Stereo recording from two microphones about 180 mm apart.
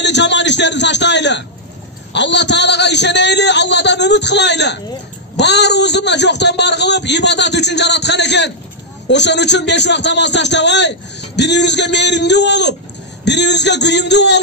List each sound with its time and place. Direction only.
0.0 s a man's voice: 75° left (ahead or behind)